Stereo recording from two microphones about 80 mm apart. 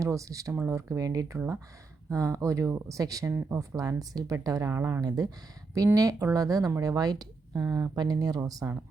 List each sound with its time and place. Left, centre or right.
0.0 s speech: right
3.3 s speech: right
3.8 s speech: right
4.7 s speech: right
4.9 s speech: right